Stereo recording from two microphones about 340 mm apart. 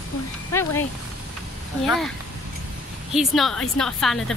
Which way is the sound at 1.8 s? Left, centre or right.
Centre.